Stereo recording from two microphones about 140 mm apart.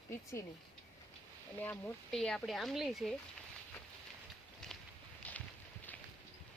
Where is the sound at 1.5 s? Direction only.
15° left (ahead or behind).